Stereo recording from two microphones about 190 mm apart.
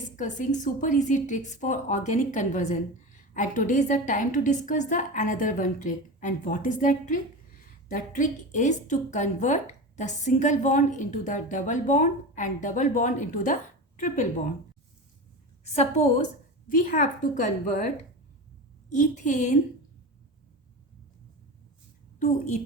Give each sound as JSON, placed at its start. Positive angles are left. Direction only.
{"t": 0.2, "sound": "a woman's voice", "side_deg": 40}
{"t": 15.6, "sound": "a woman's voice", "side_deg": 35}
{"t": 18.9, "sound": "a woman's voice", "side_deg": 40}
{"t": 22.2, "sound": "a woman's voice", "side_deg": 40}